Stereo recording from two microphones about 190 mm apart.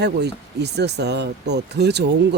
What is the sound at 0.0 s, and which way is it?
Speech, 60° right (ahead or behind).